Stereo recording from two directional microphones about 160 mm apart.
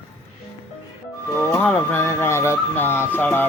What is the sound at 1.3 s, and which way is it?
Speech, 10° left (ahead or behind).